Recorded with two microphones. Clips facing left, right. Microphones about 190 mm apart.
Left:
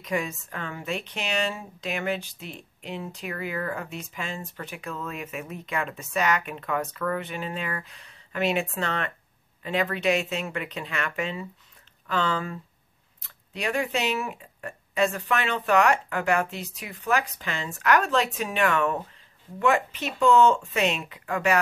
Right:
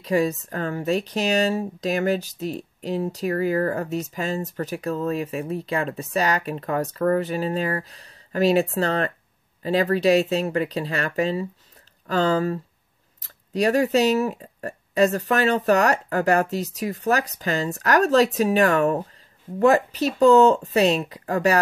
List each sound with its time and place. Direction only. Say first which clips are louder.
0.0 s speech: right 8 dB; 35° right (ahead or behind)